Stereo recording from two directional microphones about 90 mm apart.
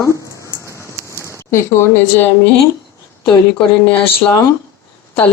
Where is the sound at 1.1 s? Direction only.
30° left (ahead or behind).